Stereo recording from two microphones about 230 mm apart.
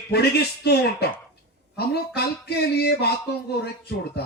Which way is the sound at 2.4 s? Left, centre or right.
Left.